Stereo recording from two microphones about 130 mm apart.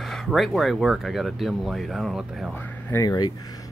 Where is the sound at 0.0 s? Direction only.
Centre (ahead or behind).